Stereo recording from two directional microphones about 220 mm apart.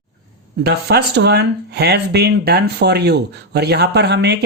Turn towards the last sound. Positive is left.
turn(degrees=-50)  # may be behind; listen again after turning